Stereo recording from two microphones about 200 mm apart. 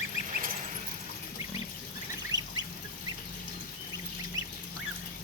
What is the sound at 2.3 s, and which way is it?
Duck, 20° right (ahead or behind).